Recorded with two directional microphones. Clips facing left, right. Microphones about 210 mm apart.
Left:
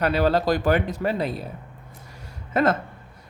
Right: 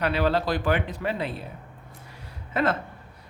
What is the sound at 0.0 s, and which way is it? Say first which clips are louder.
Speech: left 3 dB; 40° left (ahead or behind).